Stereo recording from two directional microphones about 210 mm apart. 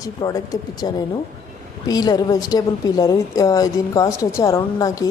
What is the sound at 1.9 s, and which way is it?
A woman's voice, 20° left (ahead or behind).